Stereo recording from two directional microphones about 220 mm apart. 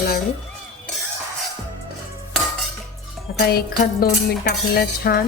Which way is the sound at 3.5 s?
45° left (ahead or behind).